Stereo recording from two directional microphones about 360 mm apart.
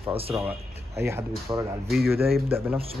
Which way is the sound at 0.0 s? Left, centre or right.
Centre.